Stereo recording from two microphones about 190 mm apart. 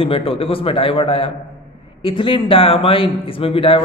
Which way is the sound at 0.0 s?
30° left (ahead or behind).